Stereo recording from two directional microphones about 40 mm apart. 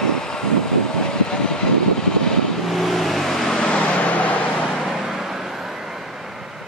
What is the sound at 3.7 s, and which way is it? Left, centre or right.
Vehicle, left.